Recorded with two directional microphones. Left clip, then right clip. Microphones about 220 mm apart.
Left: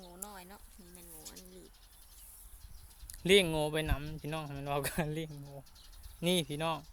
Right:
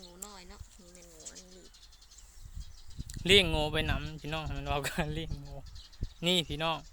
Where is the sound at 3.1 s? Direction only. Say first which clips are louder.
Right 2 dB; centre (ahead or behind).